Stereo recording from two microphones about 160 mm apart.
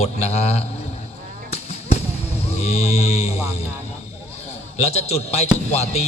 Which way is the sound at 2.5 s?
40° left (ahead or behind).